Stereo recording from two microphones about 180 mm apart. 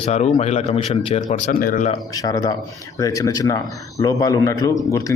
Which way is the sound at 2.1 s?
20° left (ahead or behind).